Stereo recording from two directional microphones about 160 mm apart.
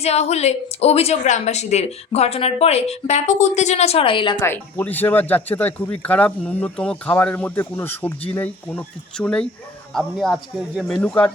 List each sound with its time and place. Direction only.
0.0 s a woman's voice: 40° left (ahead or behind)
4.4 s speech: 15° left (ahead or behind)